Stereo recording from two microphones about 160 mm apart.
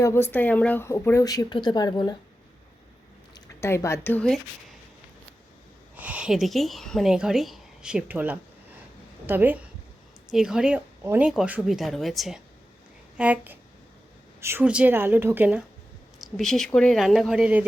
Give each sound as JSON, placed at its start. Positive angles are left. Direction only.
{"t": 0.0, "sound": "speech", "side_deg": 15}
{"t": 3.3, "sound": "speech", "side_deg": 15}
{"t": 6.0, "sound": "a woman's voice", "side_deg": -10}
{"t": 16.4, "sound": "speech", "side_deg": 5}